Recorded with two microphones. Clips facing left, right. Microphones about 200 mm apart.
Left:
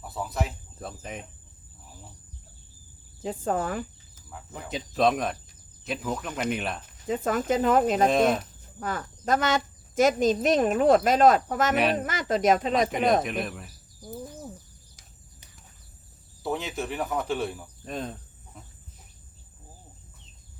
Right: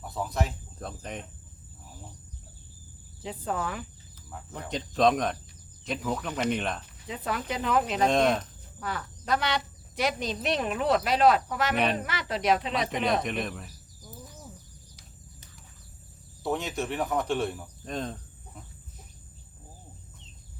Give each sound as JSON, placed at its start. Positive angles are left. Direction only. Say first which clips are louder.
{"t": 0.0, "sound": "cricket", "louder": "even", "side_deg": 0}
{"t": 3.2, "sound": "speech", "louder": "left 4 dB", "side_deg": 45}
{"t": 4.3, "sound": "cricket", "louder": "even", "side_deg": 0}
{"t": 7.0, "sound": "speech", "louder": "left 8 dB", "side_deg": 45}
{"t": 8.0, "sound": "cricket", "louder": "left 2 dB", "side_deg": 5}
{"t": 8.8, "sound": "speech", "louder": "left 3 dB", "side_deg": 45}
{"t": 13.2, "sound": "cricket", "louder": "left 1 dB", "side_deg": 5}
{"t": 16.4, "sound": "cricket", "louder": "even", "side_deg": 0}